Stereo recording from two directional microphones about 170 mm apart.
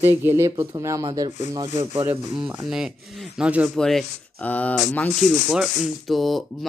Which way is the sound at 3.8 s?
5° left (ahead or behind).